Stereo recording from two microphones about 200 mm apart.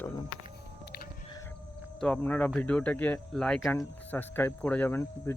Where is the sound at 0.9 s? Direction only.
50° left (ahead or behind).